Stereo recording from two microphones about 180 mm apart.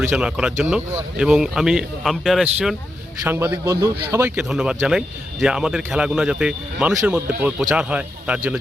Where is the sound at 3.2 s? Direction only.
10° right (ahead or behind).